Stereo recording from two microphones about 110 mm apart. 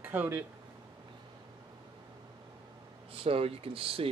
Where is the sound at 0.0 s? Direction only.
20° right (ahead or behind).